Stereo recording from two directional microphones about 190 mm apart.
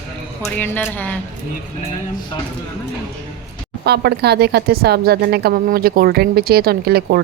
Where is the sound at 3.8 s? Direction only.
60° right (ahead or behind).